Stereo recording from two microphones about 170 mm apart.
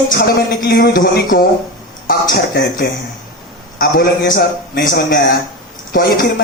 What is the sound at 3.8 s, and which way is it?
Speech, 60° left (ahead or behind).